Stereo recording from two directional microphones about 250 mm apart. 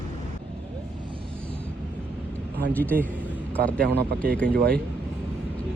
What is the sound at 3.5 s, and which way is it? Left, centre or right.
Speech, centre.